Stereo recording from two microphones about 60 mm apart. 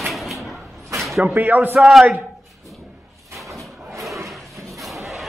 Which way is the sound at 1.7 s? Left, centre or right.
Centre.